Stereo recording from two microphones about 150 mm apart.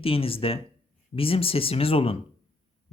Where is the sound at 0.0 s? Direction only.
40° left (ahead or behind).